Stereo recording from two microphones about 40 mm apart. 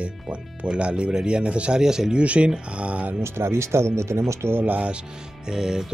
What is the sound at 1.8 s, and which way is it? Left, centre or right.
Speech, centre.